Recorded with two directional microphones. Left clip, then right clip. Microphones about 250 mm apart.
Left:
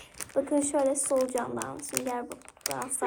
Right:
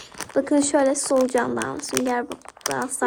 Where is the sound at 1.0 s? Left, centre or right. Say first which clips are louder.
Right 8 dB; right.